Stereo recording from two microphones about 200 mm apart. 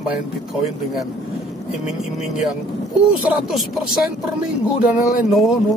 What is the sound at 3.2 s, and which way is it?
Speech, centre (ahead or behind).